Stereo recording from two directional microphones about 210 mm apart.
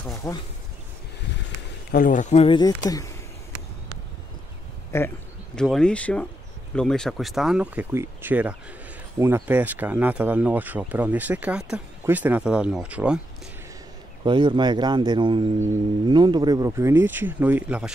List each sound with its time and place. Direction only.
0.2 s speech: 15° left (ahead or behind)
1.9 s speech: 40° left (ahead or behind); by 3.1 s 15° left (ahead or behind)
4.9 s speech: 15° left (ahead or behind); by 13.2 s 5° right (ahead or behind)
14.2 s a man's voice: 20° right (ahead or behind); by 17.9 s 5° right (ahead or behind)